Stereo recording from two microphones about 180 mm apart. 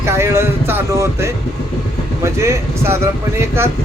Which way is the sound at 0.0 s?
15° right (ahead or behind).